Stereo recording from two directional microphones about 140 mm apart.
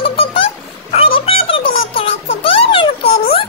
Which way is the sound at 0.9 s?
40° left (ahead or behind).